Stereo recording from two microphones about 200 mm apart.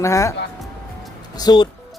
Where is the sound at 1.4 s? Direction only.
20° left (ahead or behind).